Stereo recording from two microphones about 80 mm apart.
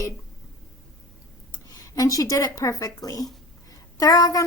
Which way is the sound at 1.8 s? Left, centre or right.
Left.